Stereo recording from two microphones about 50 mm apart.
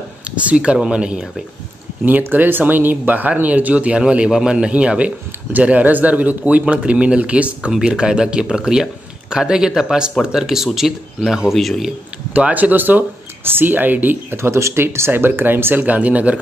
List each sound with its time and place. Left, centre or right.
0.4 s speech: right
2.0 s speech: right
4.3 s speech: centre
7.7 s speech: centre
11.5 s a man's voice: centre
12.4 s speech: right
14.3 s speech: right
15.8 s speech: right